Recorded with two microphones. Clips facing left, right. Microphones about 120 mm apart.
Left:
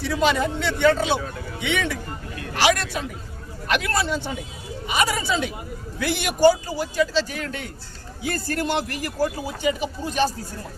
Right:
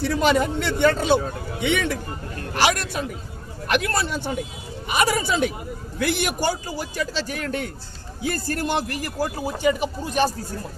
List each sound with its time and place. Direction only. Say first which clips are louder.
0.0 s a man's voice: right 2 dB; 50° right (ahead or behind)